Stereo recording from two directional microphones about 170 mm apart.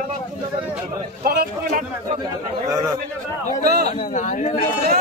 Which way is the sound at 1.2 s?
60° right (ahead or behind).